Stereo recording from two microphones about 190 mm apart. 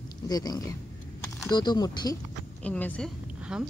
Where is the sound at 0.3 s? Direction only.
20° left (ahead or behind).